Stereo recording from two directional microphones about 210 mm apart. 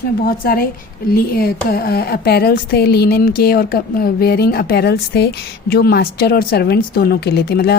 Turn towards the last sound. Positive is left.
turn(degrees=50)  # may be behind; listen again after turning